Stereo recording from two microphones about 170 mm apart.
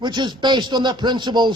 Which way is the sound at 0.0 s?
25° right (ahead or behind).